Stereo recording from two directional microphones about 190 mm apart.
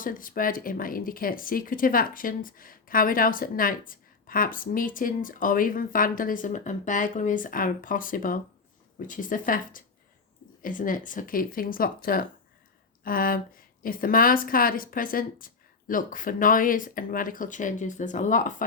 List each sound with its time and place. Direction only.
0.0 s speech: 45° left (ahead or behind)